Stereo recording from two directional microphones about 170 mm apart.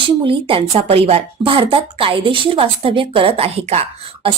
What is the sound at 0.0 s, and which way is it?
A woman's voice, 30° right (ahead or behind).